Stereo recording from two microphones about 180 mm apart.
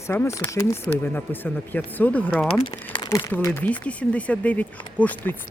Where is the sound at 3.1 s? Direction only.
15° left (ahead or behind).